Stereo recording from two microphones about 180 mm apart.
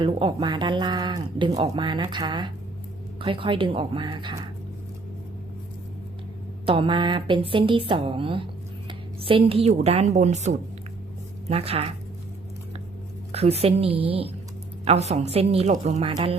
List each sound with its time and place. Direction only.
0.0 s speech: 30° right (ahead or behind)
6.7 s speech: 30° right (ahead or behind)
13.3 s speech: 35° right (ahead or behind)